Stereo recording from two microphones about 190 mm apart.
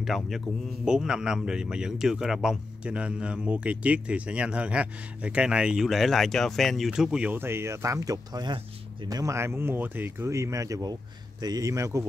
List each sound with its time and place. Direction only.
0.0 s speech: centre (ahead or behind); by 12.1 s 15° right (ahead or behind)